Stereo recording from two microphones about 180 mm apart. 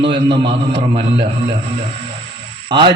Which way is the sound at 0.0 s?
25° right (ahead or behind).